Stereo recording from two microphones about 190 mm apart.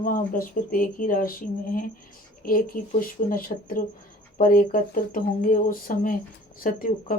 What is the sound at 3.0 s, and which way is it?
Speech, 50° left (ahead or behind).